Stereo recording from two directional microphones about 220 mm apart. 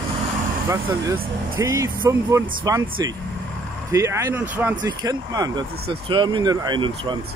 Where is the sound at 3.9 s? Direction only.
15° right (ahead or behind).